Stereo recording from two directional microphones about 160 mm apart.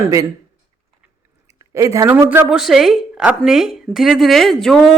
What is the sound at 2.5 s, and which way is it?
A woman's voice, centre (ahead or behind).